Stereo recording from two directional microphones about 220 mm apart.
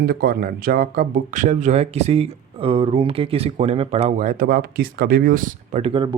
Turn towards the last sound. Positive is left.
turn(degrees=-25)  # may be behind; listen again after turning